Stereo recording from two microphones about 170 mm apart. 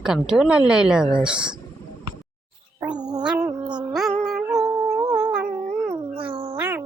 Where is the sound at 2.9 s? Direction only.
25° right (ahead or behind).